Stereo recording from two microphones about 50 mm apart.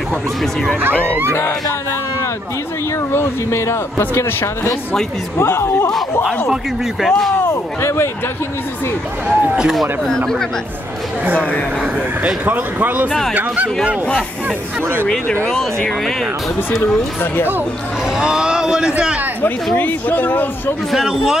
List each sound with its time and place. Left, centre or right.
0.4 s speech: centre
3.1 s speech: left
4.1 s speech: left
7.0 s speech: centre
7.4 s speech: left
9.3 s speech: centre
10.0 s speech: centre
11.3 s speech: left
12.4 s a man's voice: right
15.4 s speech: left
16.8 s speech: left
18.1 s speech: centre
19.4 s speech: left
20.9 s speech: centre